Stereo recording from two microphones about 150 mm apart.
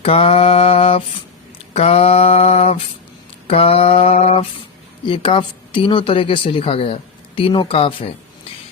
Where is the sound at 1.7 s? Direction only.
45° left (ahead or behind).